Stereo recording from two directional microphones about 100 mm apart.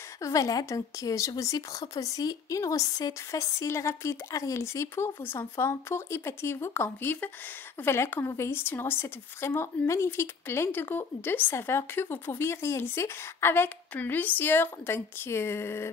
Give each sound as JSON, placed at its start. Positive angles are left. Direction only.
{"t": 0.2, "sound": "a woman's voice", "side_deg": 35}